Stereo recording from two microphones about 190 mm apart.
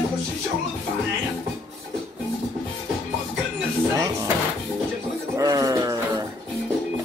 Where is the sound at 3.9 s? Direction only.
15° right (ahead or behind).